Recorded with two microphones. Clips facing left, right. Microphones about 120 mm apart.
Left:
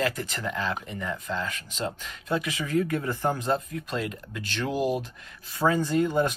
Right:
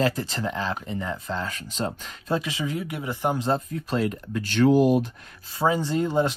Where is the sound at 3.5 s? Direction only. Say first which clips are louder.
Right 2 dB; 35° right (ahead or behind).